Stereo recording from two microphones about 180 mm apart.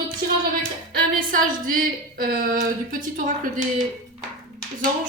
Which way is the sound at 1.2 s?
50° right (ahead or behind).